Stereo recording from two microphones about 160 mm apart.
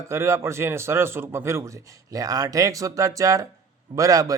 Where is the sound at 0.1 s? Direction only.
15° right (ahead or behind).